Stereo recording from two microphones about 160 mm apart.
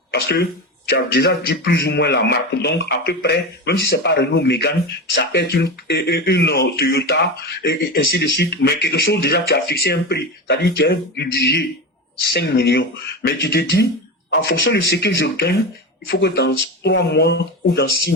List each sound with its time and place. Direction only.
0.1 s speech: 90° left
5.3 s speech: 80° left
7.6 s speech: 90° left
12.2 s speech: 75° left (ahead or behind)
14.3 s speech: 90° left